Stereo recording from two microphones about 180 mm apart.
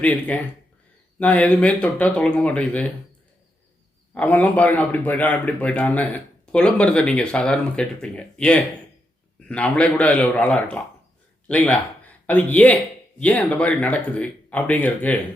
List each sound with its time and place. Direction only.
0.0 s a man's voice: 10° left (ahead or behind)
4.1 s a man's voice: 5° left (ahead or behind)